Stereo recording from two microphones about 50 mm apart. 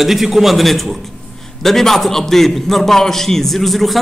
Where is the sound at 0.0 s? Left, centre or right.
Centre.